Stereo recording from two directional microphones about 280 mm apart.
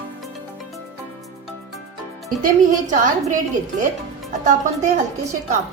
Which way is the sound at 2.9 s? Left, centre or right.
Right.